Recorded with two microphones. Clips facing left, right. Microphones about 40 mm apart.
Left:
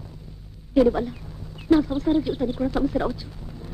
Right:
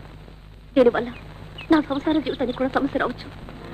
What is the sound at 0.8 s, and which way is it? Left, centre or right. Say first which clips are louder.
Speech: right 2 dB; right.